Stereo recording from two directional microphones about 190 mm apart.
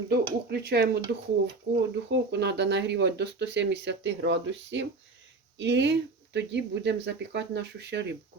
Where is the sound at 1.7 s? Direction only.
70° right (ahead or behind).